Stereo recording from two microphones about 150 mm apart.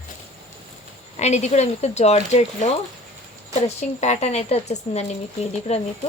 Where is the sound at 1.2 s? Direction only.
50° left (ahead or behind).